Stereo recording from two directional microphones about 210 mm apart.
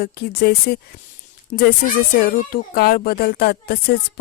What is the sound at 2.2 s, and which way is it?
Speech, 45° left (ahead or behind).